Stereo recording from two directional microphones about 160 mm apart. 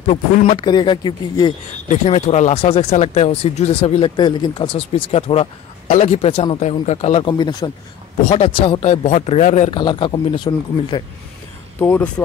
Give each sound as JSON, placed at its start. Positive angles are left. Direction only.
{"t": 0.0, "sound": "speech", "side_deg": 40}
{"t": 0.7, "sound": "speech", "side_deg": 30}
{"t": 1.9, "sound": "speech", "side_deg": 45}
{"t": 7.2, "sound": "speech", "side_deg": 25}
{"t": 9.7, "sound": "speech", "side_deg": 30}
{"t": 11.8, "sound": "speech", "side_deg": 10}